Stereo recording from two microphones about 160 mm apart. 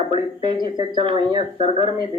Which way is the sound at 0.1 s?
30° right (ahead or behind).